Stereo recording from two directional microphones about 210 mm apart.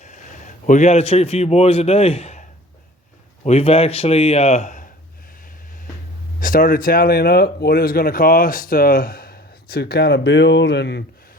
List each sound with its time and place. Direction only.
0.0 s a man's voice: 35° left (ahead or behind)
6.4 s speech: 40° left (ahead or behind)